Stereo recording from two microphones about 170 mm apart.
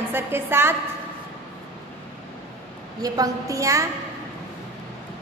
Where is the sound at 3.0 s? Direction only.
20° right (ahead or behind).